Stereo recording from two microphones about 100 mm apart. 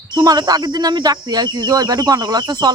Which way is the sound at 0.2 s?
40° right (ahead or behind).